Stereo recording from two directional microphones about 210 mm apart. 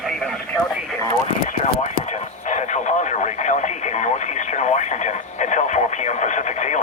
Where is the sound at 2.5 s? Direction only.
35° left (ahead or behind).